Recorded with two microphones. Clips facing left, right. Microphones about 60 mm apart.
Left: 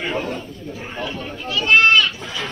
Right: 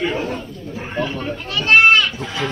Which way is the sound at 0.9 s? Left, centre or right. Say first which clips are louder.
Right 6 dB; right.